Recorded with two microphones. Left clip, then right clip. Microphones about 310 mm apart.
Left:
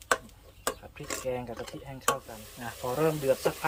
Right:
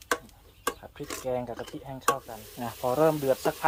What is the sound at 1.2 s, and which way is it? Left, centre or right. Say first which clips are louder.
Stir: right 4 dB; right.